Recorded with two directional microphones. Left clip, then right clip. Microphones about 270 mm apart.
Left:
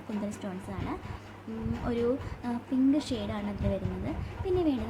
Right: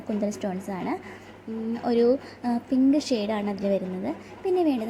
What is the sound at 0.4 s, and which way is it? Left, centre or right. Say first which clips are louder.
Speech: right 9 dB; centre.